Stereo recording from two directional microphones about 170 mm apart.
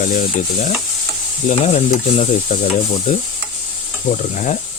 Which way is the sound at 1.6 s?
45° left (ahead or behind).